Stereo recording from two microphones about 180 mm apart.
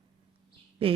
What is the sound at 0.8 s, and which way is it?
Speech, 30° right (ahead or behind).